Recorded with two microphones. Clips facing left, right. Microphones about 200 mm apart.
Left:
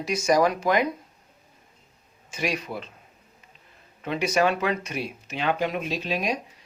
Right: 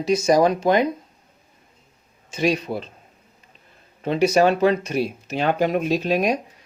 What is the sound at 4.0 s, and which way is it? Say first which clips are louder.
Speech: right 6 dB; 35° right (ahead or behind).